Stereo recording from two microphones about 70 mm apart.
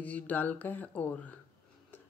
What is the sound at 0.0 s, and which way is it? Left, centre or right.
Speech, left.